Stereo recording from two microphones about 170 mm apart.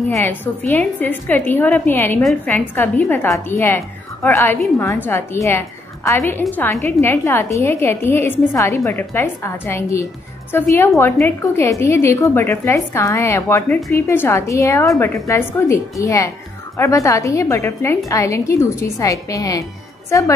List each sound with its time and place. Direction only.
0.1 s a woman's voice: 15° left (ahead or behind)